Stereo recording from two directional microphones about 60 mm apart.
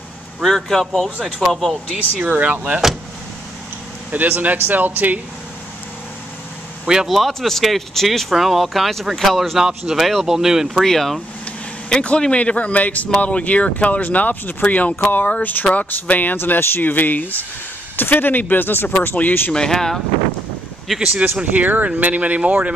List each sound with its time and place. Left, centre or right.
0.4 s speech: centre
2.2 s speech: right
2.6 s speech: centre
4.1 s speech: right
7.1 s speech: centre
10.8 s speech: centre
11.9 s speech: centre
19.5 s speech: centre
21.4 s speech: right